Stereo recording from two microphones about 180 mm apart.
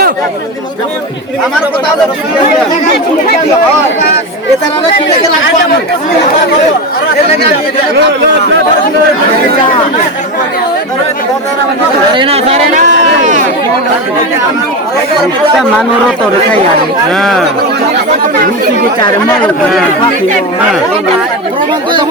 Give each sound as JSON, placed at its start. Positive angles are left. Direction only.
{"t": 12.1, "sound": "speech", "side_deg": -30}